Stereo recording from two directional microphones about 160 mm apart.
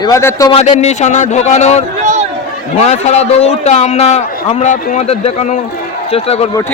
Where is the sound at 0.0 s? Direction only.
20° left (ahead or behind).